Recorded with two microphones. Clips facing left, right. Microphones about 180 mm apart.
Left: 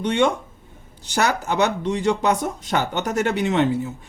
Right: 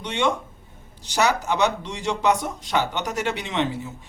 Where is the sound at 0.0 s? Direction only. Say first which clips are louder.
Left 5 dB; 55° left (ahead or behind).